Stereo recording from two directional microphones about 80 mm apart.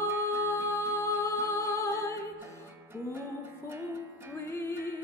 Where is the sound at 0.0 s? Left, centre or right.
Right.